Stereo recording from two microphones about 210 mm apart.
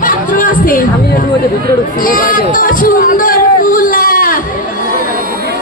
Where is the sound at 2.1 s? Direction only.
40° left (ahead or behind).